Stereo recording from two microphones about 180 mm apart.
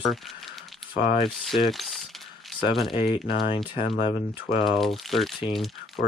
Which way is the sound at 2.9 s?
30° left (ahead or behind).